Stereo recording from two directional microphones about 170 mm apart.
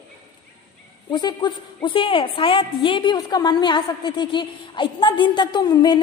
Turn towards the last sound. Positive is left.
turn(degrees=25)  # may be behind; listen again after turning